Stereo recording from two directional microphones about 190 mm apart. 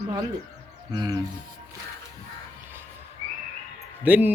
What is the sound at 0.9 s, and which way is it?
Speech, 20° right (ahead or behind).